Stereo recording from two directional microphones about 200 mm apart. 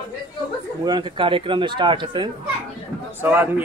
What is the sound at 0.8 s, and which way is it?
Speech, 20° right (ahead or behind).